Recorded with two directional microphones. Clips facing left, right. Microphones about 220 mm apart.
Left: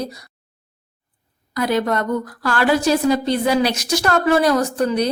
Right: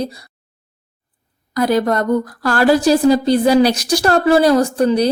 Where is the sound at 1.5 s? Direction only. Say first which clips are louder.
Right 4 dB; 40° right (ahead or behind).